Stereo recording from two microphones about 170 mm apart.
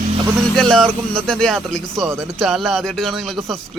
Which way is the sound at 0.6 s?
5° left (ahead or behind).